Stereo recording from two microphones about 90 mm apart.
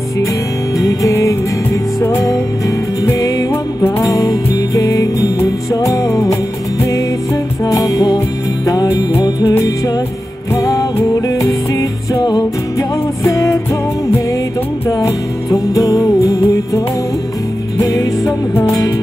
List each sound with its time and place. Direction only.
0.7 s music: 35° left (ahead or behind)
7.6 s music: 40° left (ahead or behind)
10.5 s music: 35° left (ahead or behind)
14.9 s music: 35° left (ahead or behind)